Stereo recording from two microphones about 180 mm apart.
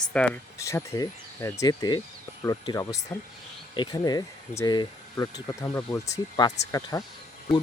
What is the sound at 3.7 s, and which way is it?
Speech, 25° left (ahead or behind).